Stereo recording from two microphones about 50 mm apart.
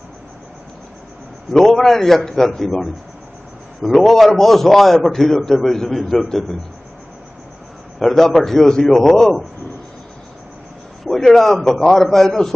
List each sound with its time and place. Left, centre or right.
1.5 s a man's voice: centre
7.9 s a man's voice: centre
11.0 s a man's voice: centre